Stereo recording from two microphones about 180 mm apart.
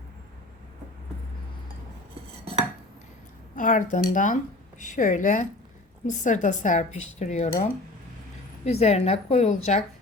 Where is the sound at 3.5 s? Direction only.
45° left (ahead or behind).